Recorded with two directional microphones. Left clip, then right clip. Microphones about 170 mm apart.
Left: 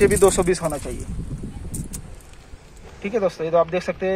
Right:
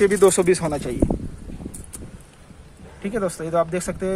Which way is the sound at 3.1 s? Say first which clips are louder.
Left 3 dB; 20° right (ahead or behind).